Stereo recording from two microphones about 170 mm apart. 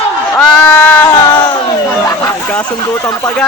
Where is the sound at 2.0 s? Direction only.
15° left (ahead or behind).